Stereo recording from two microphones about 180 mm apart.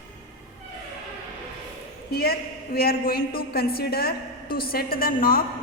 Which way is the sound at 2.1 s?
60° left (ahead or behind).